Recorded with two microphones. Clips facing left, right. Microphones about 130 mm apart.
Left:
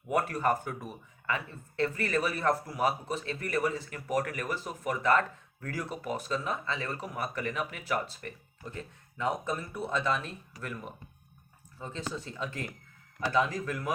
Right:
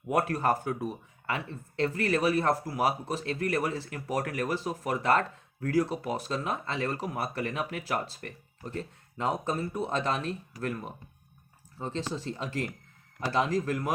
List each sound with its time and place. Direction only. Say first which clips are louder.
0.1 s speech: right 2 dB; 40° right (ahead or behind)
8.6 s speech: right 5 dB; 30° right (ahead or behind)
11.8 s speech: right 4 dB; 35° right (ahead or behind)